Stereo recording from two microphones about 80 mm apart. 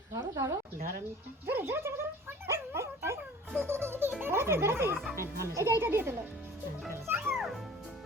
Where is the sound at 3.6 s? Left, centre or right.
Right.